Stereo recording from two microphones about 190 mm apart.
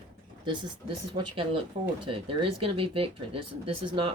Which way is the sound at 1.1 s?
30° right (ahead or behind).